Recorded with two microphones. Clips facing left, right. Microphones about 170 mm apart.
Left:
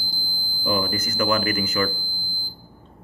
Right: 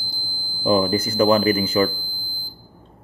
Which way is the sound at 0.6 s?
30° right (ahead or behind).